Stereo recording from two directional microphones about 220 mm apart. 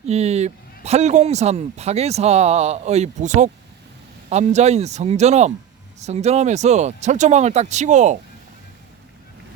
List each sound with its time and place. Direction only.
0.0 s speech: 30° right (ahead or behind)